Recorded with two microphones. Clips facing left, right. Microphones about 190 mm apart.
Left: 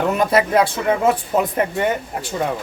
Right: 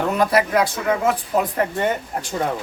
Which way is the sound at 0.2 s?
25° left (ahead or behind).